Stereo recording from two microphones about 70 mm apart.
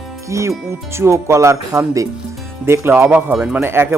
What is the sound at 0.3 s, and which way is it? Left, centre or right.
Speech, right.